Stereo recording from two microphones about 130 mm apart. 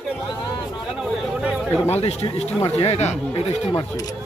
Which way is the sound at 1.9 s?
55° left (ahead or behind).